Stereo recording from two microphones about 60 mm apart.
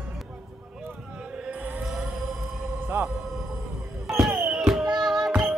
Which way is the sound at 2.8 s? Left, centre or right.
Right.